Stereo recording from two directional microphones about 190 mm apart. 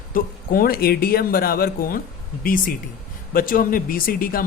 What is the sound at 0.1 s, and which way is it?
Speech, 50° left (ahead or behind).